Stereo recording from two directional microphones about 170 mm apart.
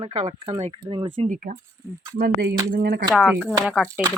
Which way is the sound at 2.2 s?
65° right (ahead or behind).